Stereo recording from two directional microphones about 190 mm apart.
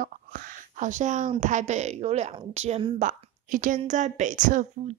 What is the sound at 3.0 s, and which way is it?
Speech, 45° right (ahead or behind).